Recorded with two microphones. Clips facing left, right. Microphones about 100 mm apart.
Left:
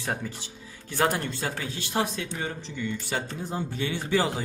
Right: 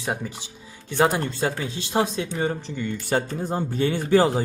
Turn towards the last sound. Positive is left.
turn(degrees=-45)  # may be behind; listen again after turning